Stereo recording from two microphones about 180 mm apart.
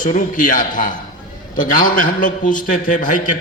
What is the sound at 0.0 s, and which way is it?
A man's voice, 45° left (ahead or behind).